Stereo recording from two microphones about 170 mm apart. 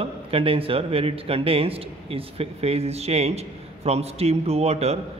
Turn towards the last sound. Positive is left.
turn(degrees=-40)  # may be behind; listen again after turning